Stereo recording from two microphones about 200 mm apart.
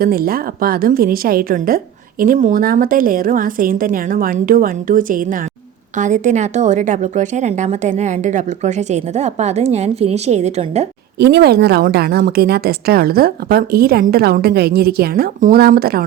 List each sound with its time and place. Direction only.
0.0 s a woman's voice: 45° right (ahead or behind)
11.2 s a woman's voice: 55° right (ahead or behind)